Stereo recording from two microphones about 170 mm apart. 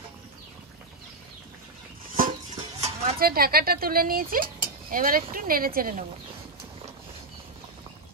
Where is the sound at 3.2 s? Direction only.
60° right (ahead or behind).